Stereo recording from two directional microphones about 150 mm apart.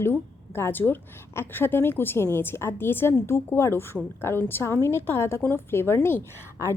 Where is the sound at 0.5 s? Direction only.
15° left (ahead or behind).